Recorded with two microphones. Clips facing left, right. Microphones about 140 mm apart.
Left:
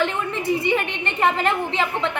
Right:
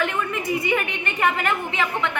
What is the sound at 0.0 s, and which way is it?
A woman's voice, 30° left (ahead or behind).